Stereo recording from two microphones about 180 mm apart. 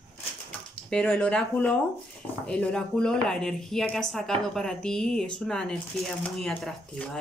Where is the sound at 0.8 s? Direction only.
5° left (ahead or behind).